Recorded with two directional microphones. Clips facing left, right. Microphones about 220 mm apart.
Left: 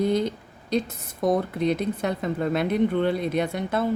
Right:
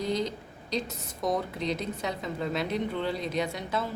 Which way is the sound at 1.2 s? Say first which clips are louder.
Left 7 dB; 55° left (ahead or behind).